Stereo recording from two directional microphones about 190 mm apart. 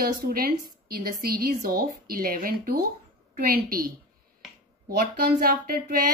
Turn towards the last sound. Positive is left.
turn(degrees=-50)  # may be behind; listen again after turning